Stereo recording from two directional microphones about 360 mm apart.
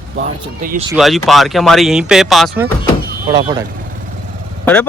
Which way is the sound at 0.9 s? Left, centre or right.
Centre.